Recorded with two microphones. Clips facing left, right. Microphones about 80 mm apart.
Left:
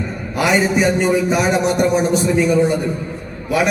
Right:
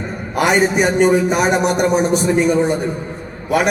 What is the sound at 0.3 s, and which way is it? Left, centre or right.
A man's voice, right.